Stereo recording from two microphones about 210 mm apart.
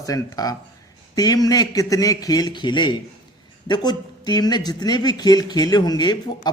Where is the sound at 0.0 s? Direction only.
15° left (ahead or behind).